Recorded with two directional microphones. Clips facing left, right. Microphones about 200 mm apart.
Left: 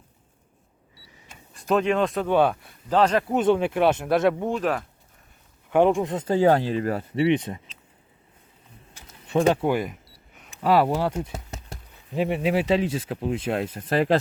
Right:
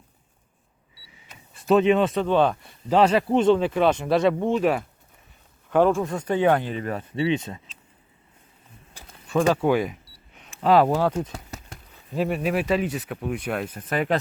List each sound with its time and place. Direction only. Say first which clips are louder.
1.5 s speech: right 4 dB; centre (ahead or behind)
2.2 s speech: even; 10° left (ahead or behind)
2.9 s speech: right 2 dB; 10° right (ahead or behind)
5.7 s speech: even; 15° left (ahead or behind)
8.9 s a sound: right 4 dB; 30° right (ahead or behind)
9.2 s speech: left 1 dB; 20° left (ahead or behind)
9.8 s camera: right 3 dB; centre (ahead or behind)
12.1 s speech: left 1 dB; 20° left (ahead or behind)